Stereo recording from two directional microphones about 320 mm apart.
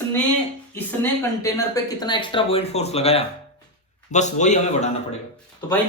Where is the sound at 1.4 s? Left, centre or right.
Centre.